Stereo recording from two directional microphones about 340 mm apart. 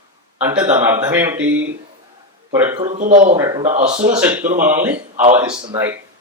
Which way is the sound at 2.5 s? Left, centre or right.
Centre.